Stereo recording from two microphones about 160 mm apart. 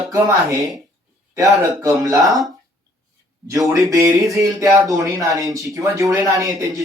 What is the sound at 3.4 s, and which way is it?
Speech, 20° right (ahead or behind).